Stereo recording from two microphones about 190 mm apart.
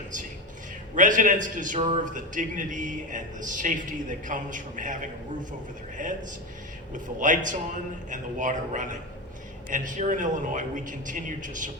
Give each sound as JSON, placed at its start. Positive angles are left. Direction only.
{"t": 0.9, "sound": "a man's voice", "side_deg": -45}
{"t": 7.2, "sound": "a man's voice", "side_deg": -45}